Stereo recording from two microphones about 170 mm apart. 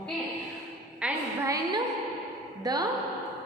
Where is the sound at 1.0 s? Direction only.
5° right (ahead or behind).